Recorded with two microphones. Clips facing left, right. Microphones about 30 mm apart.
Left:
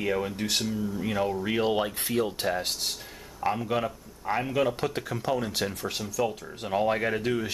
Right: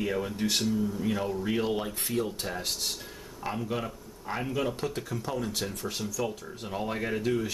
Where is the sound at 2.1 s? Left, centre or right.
Left.